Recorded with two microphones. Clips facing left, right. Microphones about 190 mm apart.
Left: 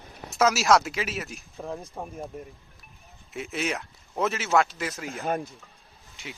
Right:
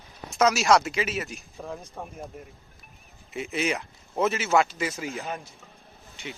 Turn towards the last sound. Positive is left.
turn(degrees=0)  # may be behind; listen again after turning